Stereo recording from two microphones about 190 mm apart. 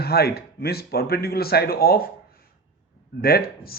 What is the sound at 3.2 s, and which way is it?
Speech, 55° left (ahead or behind).